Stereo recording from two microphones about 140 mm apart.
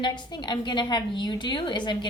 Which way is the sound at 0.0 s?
30° left (ahead or behind).